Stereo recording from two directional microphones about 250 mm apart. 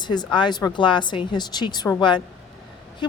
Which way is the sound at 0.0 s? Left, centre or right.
Centre.